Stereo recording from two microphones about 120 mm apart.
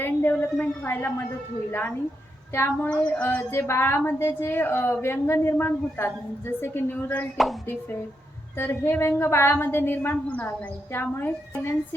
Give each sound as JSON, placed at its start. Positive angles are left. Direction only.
{"t": 0.0, "sound": "a sound", "side_deg": 15}
{"t": 0.6, "sound": "a woman's voice", "side_deg": 15}
{"t": 2.6, "sound": "a woman's voice", "side_deg": 20}
{"t": 8.5, "sound": "a woman's voice", "side_deg": 20}